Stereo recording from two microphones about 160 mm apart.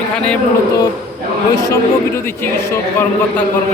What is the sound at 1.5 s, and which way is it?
Speech, 20° left (ahead or behind).